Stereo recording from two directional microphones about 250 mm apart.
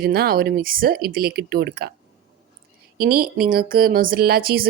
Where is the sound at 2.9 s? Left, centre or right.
Right.